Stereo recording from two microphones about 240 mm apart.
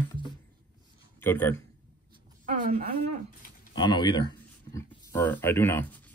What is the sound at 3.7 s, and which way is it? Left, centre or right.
Speech, centre.